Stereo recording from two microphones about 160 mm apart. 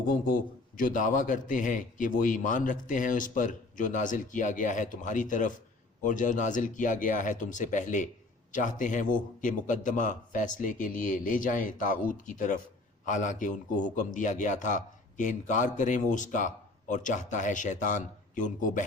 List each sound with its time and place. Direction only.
0.8 s a man's voice: 55° left (ahead or behind)